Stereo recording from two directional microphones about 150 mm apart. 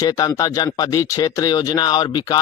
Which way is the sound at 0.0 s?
25° left (ahead or behind).